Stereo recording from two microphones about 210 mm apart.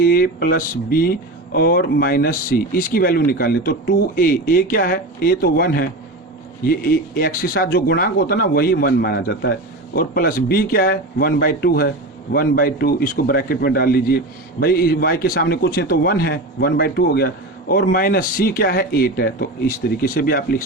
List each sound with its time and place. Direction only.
0.0 s a man's voice: 45° left (ahead or behind)